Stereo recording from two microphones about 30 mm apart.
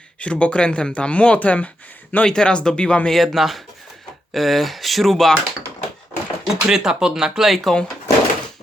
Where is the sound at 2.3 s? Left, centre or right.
Left.